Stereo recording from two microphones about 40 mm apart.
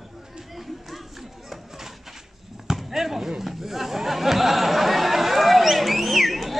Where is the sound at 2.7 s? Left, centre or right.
Centre.